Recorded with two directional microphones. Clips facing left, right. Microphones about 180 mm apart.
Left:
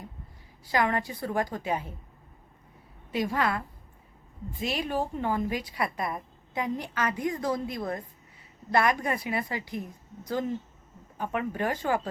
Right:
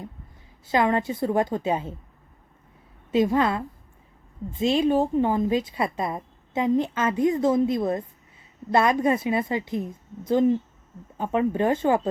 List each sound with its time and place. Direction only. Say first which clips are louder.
0.7 s a woman's voice: right 5 dB; 20° right (ahead or behind)
3.1 s a woman's voice: right 7 dB; 25° right (ahead or behind)
4.6 s a woman's voice: right 9 dB; 25° right (ahead or behind)